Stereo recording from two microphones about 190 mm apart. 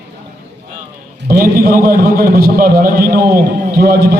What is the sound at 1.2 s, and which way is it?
A man's voice, 50° right (ahead or behind).